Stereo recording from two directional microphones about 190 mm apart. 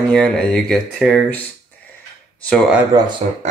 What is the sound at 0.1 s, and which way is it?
Speech, 5° left (ahead or behind).